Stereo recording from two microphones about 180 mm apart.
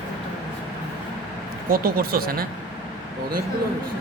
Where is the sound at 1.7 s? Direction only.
55° right (ahead or behind).